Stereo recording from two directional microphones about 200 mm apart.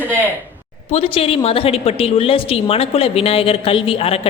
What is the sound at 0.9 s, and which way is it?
A woman's voice, 30° left (ahead or behind).